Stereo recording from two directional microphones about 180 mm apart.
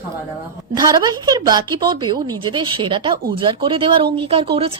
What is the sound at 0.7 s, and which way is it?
Speech, 25° right (ahead or behind).